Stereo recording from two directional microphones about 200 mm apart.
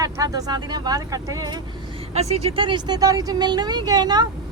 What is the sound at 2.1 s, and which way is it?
Speech, 30° right (ahead or behind).